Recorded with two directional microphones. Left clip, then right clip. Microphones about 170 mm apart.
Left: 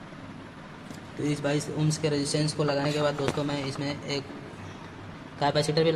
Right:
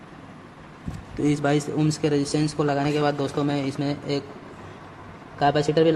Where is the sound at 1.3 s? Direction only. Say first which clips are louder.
Right 6 dB; 65° right (ahead or behind).